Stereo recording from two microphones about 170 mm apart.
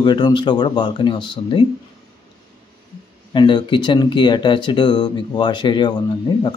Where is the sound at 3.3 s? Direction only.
25° left (ahead or behind).